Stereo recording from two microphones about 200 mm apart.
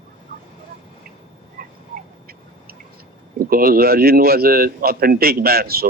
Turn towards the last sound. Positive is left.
turn(degrees=-50)  # may be behind; listen again after turning